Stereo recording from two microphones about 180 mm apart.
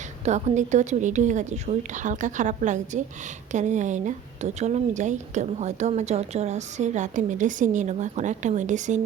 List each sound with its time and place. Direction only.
0.3 s a woman's voice: 40° right (ahead or behind)